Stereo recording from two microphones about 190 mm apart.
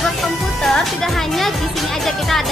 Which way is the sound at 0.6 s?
Centre (ahead or behind).